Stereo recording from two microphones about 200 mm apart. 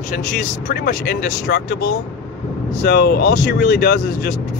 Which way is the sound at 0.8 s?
55° left (ahead or behind).